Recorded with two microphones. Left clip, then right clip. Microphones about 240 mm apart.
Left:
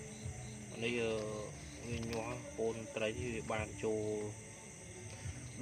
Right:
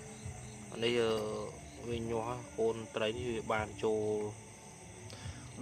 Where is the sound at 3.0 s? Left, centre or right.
Right.